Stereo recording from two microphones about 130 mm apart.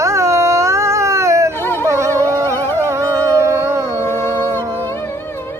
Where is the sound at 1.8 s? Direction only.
25° right (ahead or behind).